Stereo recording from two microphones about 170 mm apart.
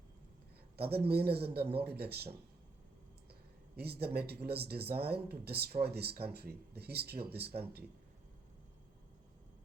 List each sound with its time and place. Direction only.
0.8 s speech: 70° right (ahead or behind)
3.8 s speech: 70° right (ahead or behind)